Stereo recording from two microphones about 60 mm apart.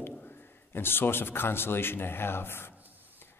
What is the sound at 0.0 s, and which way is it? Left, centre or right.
A man's voice, left.